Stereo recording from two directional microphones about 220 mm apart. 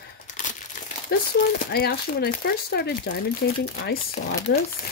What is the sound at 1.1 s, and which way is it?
Speech, 45° left (ahead or behind).